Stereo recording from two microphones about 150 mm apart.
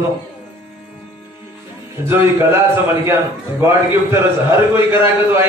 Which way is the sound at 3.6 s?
15° right (ahead or behind).